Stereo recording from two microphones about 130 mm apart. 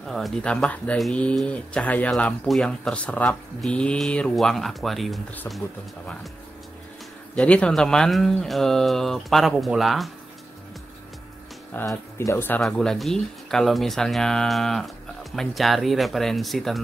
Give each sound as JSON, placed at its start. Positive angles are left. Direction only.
{"t": 0.0, "sound": "speech", "side_deg": 0}
{"t": 7.3, "sound": "speech", "side_deg": 10}
{"t": 11.7, "sound": "speech", "side_deg": 25}
{"t": 12.6, "sound": "speech", "side_deg": 5}